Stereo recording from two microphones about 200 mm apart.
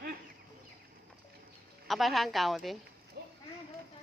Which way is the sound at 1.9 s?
Centre (ahead or behind).